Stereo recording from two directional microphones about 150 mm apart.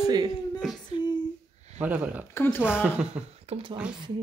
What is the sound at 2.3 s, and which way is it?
Speech, 15° left (ahead or behind).